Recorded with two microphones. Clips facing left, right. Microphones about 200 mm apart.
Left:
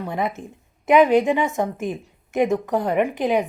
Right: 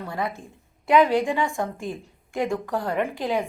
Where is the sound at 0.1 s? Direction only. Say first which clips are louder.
Left 3 dB; 20° left (ahead or behind).